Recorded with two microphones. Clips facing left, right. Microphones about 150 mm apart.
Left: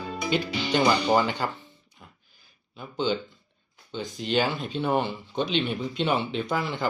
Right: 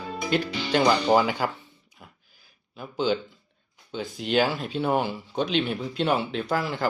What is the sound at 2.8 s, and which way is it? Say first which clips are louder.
Speech: right 2 dB; 5° right (ahead or behind).